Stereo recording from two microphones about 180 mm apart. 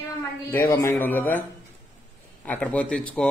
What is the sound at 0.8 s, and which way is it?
Speech, 10° left (ahead or behind).